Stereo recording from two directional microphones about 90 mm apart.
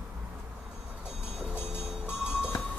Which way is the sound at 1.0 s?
10° right (ahead or behind).